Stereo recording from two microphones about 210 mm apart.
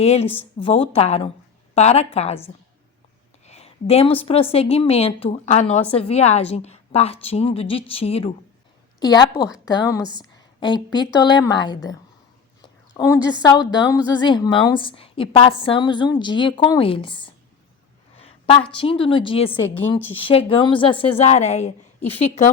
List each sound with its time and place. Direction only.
0.0 s a woman's voice: 30° left (ahead or behind)
10.2 s a sound: 20° left (ahead or behind)
10.9 s a woman's voice: 20° left (ahead or behind)
13.0 s a woman's voice: 15° left (ahead or behind)
18.2 s a sound: 30° left (ahead or behind)
18.8 s a woman's voice: 25° left (ahead or behind)